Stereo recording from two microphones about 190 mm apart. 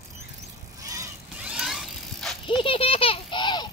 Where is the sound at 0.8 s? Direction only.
15° right (ahead or behind).